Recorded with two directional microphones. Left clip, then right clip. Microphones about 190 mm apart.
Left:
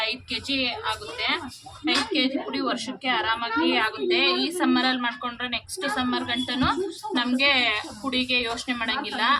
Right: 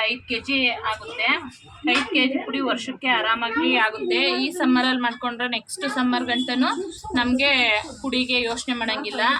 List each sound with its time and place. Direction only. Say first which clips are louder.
0.0 s a woman's voice: right 4 dB; 25° right (ahead or behind)